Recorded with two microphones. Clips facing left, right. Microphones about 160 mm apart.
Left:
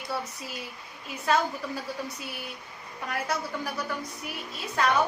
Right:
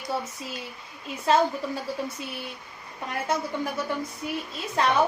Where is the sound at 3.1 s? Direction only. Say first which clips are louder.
Right 3 dB; 25° right (ahead or behind).